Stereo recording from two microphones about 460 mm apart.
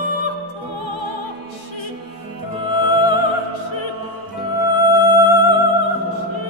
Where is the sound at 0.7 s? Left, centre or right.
Left.